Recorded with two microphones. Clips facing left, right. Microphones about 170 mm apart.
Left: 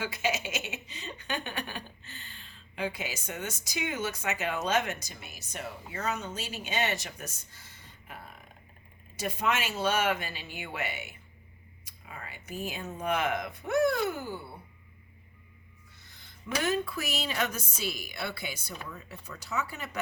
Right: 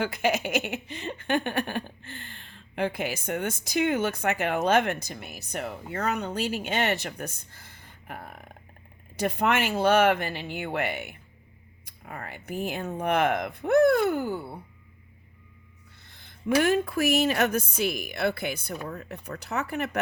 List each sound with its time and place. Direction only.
0.0 s speech: 55° right (ahead or behind)
16.0 s speech: 55° right (ahead or behind)